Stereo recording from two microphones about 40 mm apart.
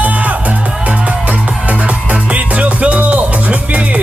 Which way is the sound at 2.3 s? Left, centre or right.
Right.